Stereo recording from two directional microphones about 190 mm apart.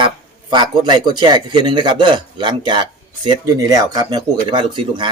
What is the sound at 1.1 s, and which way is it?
Speech, 25° right (ahead or behind).